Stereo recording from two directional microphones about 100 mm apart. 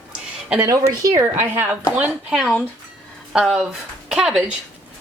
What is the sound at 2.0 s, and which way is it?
Speech, 10° right (ahead or behind).